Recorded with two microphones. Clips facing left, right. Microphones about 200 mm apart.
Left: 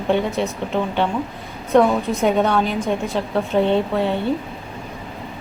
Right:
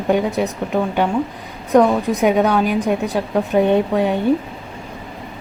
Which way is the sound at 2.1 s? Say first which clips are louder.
Right 2 dB; 10° right (ahead or behind).